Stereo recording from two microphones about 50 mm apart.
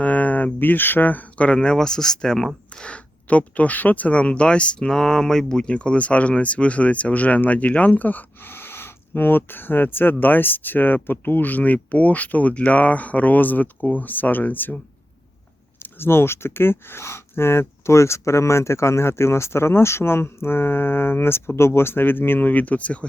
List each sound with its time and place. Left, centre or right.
0.0 s a sound: left
1.5 s speech: centre
2.6 s speech: left
15.8 s speech: left